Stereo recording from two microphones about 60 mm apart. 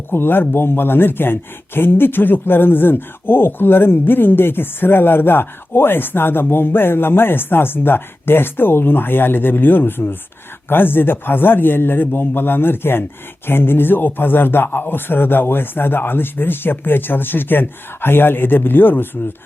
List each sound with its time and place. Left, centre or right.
0.1 s speech: left